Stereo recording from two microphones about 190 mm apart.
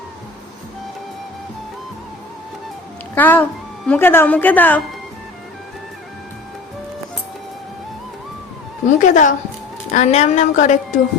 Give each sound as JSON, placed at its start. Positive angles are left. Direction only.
{"t": 3.2, "sound": "a woman's voice", "side_deg": 10}
{"t": 8.9, "sound": "a woman's voice", "side_deg": 40}